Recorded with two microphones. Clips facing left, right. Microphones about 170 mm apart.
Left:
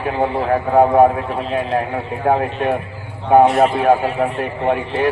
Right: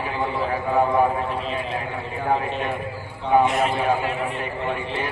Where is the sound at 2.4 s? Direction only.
65° left (ahead or behind).